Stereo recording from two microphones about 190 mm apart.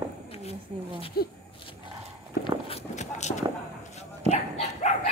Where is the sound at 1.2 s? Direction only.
55° left (ahead or behind).